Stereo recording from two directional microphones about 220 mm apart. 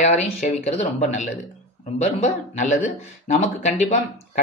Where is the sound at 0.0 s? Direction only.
30° left (ahead or behind).